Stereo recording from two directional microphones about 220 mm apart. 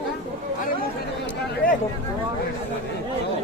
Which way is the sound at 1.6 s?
40° left (ahead or behind).